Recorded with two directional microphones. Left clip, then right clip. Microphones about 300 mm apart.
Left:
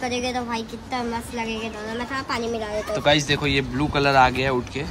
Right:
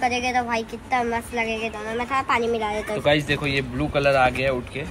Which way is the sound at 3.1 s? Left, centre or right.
Left.